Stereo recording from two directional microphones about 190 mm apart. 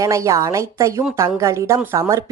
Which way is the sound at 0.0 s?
15° right (ahead or behind).